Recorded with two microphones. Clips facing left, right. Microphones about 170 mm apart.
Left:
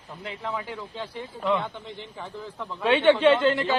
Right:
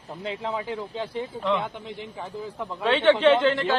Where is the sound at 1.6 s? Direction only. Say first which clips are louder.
Right 2 dB; 10° right (ahead or behind).